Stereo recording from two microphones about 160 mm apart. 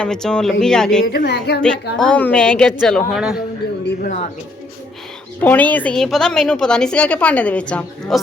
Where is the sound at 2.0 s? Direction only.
10° left (ahead or behind).